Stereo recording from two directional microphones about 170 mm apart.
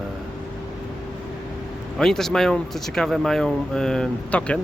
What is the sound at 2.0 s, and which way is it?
Speech, 5° left (ahead or behind).